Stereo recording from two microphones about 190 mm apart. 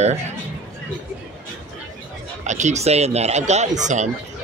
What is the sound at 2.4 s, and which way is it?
Speech, 40° right (ahead or behind).